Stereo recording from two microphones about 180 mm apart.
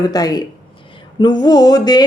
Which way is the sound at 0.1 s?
20° left (ahead or behind).